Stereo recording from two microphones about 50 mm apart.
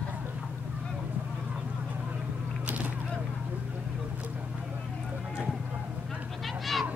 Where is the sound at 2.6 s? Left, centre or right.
Right.